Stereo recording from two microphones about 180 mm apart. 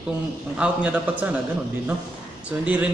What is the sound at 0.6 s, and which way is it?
Speech, 5° right (ahead or behind).